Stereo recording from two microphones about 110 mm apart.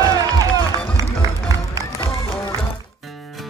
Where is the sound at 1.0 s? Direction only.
30° right (ahead or behind).